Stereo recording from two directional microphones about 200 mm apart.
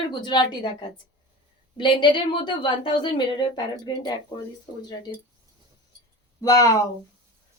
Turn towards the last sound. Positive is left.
turn(degrees=20)  # may be behind; listen again after turning